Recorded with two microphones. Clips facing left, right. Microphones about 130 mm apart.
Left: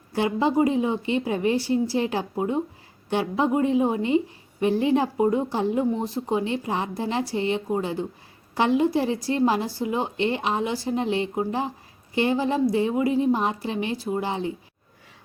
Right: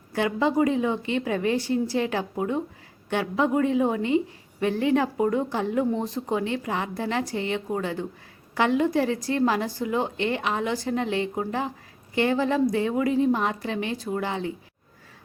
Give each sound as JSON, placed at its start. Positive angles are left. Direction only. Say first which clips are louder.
{"t": 0.1, "sound": "speech", "louder": "left 1 dB", "side_deg": 25}
{"t": 6.0, "sound": "speech", "louder": "left 1 dB", "side_deg": 10}
{"t": 6.3, "sound": "speech", "louder": "left 1 dB", "side_deg": 25}